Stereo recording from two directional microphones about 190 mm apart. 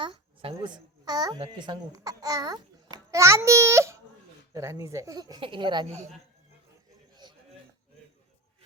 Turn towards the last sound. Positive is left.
turn(degrees=-20)  # may be behind; listen again after turning